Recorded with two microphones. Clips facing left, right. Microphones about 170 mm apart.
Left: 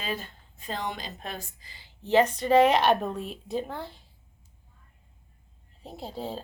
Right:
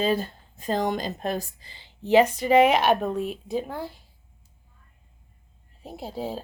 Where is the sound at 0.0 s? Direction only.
35° right (ahead or behind).